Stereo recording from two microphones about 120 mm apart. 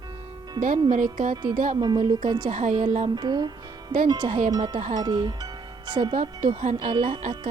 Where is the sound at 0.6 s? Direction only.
85° right.